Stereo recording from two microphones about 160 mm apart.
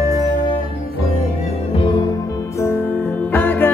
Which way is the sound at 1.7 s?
30° left (ahead or behind).